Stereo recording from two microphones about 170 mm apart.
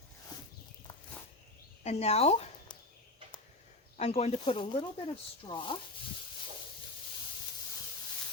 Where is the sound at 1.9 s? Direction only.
40° left (ahead or behind).